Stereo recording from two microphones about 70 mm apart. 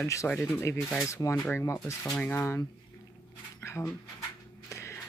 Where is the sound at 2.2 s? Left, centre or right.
Left.